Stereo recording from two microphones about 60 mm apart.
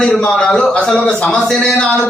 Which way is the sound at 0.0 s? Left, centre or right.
Centre.